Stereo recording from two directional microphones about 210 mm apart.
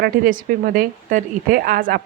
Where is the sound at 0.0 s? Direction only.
40° right (ahead or behind).